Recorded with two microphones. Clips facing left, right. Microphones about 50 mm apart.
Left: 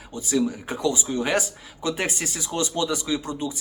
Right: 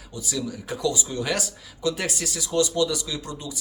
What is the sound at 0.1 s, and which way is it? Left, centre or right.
Speech, left.